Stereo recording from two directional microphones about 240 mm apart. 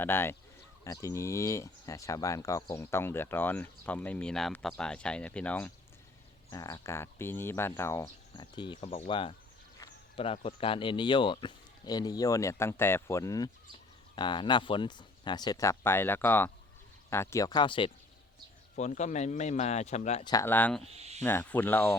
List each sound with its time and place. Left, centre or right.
0.0 s speech: centre
20.8 s speech: right
21.2 s speech: centre